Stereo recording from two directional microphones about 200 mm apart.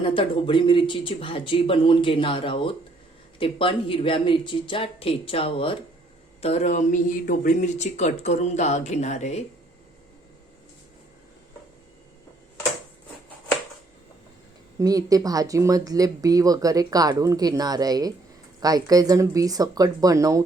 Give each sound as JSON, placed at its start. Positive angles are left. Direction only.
{"t": 0.2, "sound": "speech", "side_deg": 25}
{"t": 14.8, "sound": "speech", "side_deg": -15}